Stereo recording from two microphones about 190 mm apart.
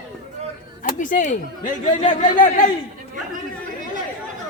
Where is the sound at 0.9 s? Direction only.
40° left (ahead or behind).